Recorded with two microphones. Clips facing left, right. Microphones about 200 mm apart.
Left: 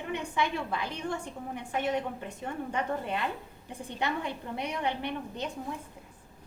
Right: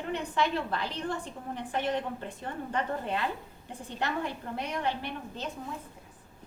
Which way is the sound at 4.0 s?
15° left (ahead or behind).